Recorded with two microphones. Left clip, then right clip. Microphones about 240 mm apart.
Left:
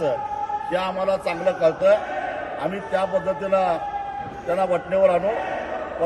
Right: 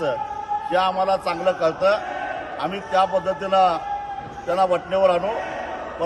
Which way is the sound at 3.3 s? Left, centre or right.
Centre.